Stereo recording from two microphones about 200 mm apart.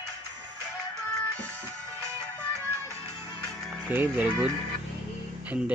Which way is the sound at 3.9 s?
10° right (ahead or behind).